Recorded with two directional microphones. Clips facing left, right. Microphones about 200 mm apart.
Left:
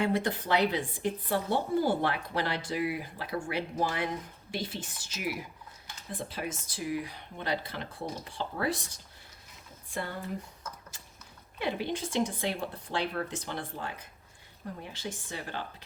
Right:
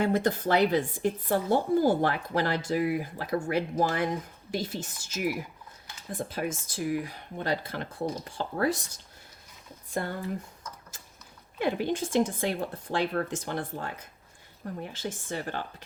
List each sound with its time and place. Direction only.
0.0 s speech: 45° right (ahead or behind)
9.9 s speech: 45° right (ahead or behind)
11.6 s speech: 50° right (ahead or behind)
14.9 s speech: 50° right (ahead or behind)